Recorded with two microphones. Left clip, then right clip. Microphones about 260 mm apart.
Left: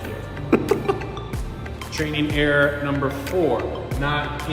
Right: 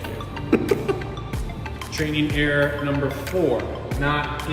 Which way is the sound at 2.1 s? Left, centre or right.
Centre.